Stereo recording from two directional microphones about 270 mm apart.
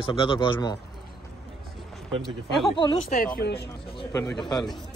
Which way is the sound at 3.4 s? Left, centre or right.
Left.